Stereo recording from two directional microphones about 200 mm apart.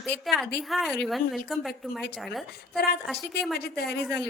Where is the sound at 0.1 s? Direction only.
Centre (ahead or behind).